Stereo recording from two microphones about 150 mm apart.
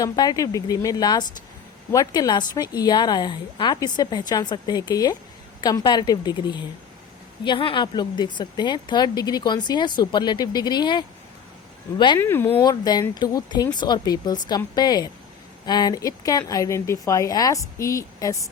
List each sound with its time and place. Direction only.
0.0 s a woman's voice: 25° left (ahead or behind)
12.2 s speech: 15° left (ahead or behind)
12.6 s a woman's voice: 25° left (ahead or behind)